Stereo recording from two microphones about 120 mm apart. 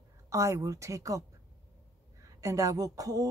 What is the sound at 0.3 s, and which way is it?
Speech, 25° right (ahead or behind).